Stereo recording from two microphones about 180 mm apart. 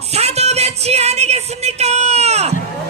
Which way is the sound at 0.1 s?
35° right (ahead or behind).